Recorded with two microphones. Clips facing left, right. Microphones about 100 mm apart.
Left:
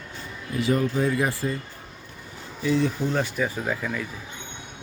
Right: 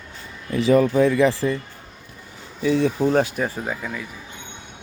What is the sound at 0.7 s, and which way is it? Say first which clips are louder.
Speech: right 7 dB; 90° right.